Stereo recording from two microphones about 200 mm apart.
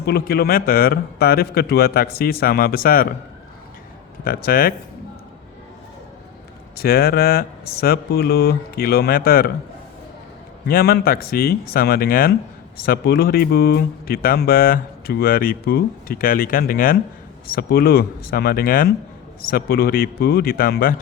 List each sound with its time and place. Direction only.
0.0 s speech: 50° left (ahead or behind)
4.2 s speech: 50° left (ahead or behind)
6.7 s speech: 50° left (ahead or behind)
10.7 s speech: 50° left (ahead or behind)